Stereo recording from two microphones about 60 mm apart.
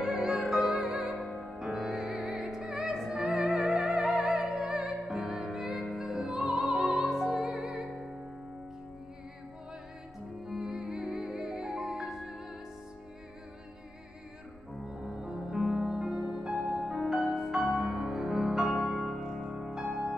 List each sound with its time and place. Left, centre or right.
0.0 s music: centre
0.4 s music: centre
1.0 s music: centre
10.4 s music: centre
14.9 s music: centre